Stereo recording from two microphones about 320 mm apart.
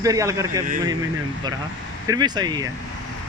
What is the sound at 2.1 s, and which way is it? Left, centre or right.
Speech, centre.